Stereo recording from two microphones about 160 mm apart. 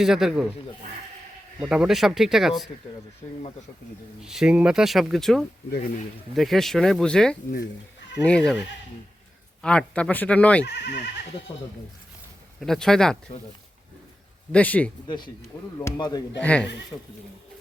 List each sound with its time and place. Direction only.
0.0 s speech: centre (ahead or behind)
1.6 s speech: 5° right (ahead or behind)
4.2 s speech: 5° right (ahead or behind)
9.6 s speech: 5° left (ahead or behind)
10.7 s speech: 90° left
12.5 s speech: centre (ahead or behind)
14.5 s speech: 10° left (ahead or behind)
15.0 s speech: 30° left (ahead or behind)
16.4 s speech: 10° left (ahead or behind)